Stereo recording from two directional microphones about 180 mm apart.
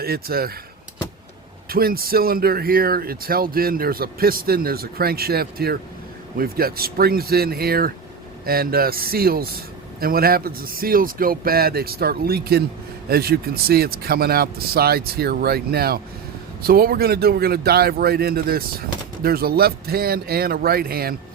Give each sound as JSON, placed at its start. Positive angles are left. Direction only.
{"t": 0.0, "sound": "speech", "side_deg": -60}
{"t": 1.7, "sound": "speech", "side_deg": -55}